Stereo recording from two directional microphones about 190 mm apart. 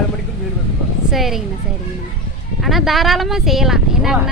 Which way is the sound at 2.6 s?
Centre (ahead or behind).